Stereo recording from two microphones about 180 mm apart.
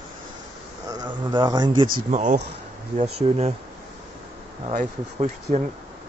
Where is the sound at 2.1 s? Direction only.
40° right (ahead or behind).